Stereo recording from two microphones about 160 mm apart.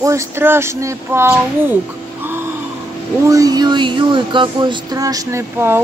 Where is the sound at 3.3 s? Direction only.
20° right (ahead or behind).